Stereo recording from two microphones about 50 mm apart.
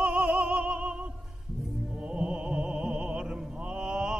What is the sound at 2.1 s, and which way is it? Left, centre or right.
Music, centre.